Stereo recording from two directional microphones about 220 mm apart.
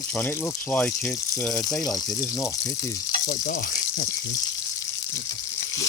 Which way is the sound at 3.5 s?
40° left (ahead or behind).